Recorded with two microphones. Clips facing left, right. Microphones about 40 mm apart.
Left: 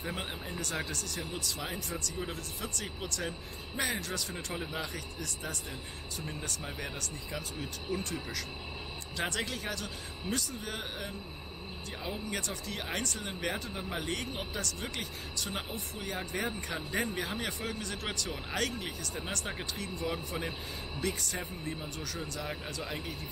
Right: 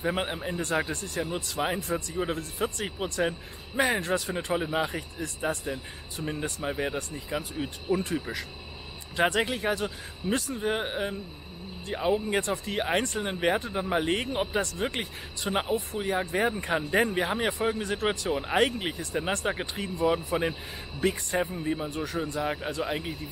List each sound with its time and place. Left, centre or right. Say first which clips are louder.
0.0 s speech: right 9 dB; right